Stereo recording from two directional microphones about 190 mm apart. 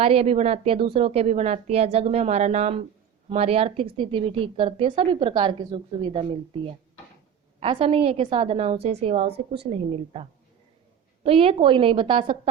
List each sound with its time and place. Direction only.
0.0 s a woman's voice: 30° right (ahead or behind)
7.6 s a woman's voice: 25° right (ahead or behind)